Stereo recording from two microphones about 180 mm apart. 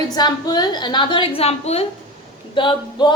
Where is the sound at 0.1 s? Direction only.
25° left (ahead or behind).